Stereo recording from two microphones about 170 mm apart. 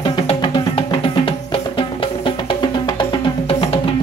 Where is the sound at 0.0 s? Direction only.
25° left (ahead or behind).